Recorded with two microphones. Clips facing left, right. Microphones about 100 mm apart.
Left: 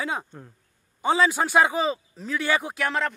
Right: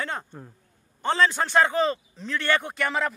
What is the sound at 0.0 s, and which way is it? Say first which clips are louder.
A man's voice: left 2 dB; 5° left (ahead or behind).